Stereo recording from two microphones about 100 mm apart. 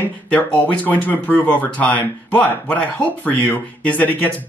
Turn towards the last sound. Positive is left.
turn(degrees=15)  # may be behind; listen again after turning